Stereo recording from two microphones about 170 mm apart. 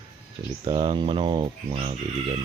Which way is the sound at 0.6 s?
30° right (ahead or behind).